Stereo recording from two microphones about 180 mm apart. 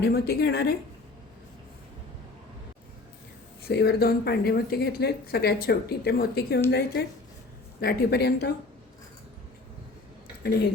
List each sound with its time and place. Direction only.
0.0 s speech: 60° left (ahead or behind)
3.7 s speech: 65° left (ahead or behind)